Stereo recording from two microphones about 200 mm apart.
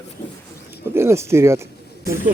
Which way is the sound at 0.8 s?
10° right (ahead or behind).